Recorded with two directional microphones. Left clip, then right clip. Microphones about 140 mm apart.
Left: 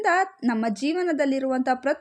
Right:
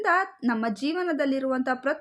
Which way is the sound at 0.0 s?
40° left (ahead or behind).